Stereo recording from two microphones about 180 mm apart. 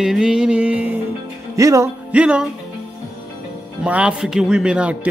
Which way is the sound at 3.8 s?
5° right (ahead or behind).